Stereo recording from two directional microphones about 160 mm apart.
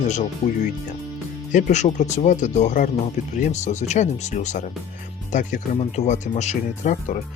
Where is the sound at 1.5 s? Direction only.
50° left (ahead or behind).